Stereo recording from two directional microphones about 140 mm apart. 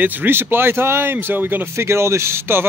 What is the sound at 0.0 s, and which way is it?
Speech, 15° right (ahead or behind).